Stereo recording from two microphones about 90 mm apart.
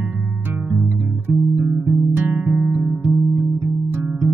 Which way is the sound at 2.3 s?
10° right (ahead or behind).